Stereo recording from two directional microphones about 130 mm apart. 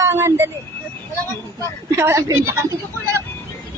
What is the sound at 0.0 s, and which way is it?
Speech, 20° right (ahead or behind).